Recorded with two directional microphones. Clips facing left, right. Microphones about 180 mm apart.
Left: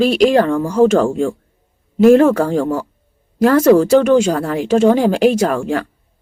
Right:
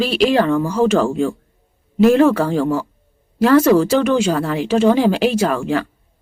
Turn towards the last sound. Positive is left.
turn(degrees=45)  # may be behind; listen again after turning